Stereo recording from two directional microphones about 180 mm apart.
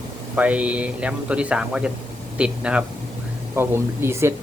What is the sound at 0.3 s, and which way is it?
A man's voice, 10° right (ahead or behind).